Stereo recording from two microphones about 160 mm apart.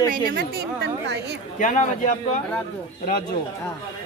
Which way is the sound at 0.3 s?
80° right.